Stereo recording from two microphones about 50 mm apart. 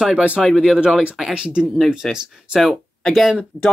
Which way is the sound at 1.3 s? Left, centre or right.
Centre.